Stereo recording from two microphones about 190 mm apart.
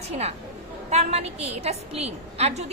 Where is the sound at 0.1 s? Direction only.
35° right (ahead or behind).